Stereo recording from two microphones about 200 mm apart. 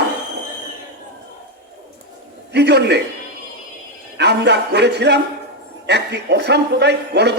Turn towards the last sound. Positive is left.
turn(degrees=-55)  # may be behind; listen again after turning